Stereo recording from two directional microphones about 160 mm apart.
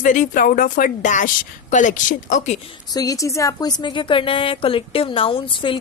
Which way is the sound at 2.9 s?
25° left (ahead or behind).